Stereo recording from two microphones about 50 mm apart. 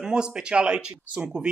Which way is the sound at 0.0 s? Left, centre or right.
Centre.